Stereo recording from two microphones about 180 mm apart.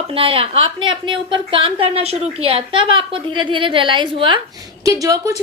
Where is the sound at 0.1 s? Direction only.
30° right (ahead or behind).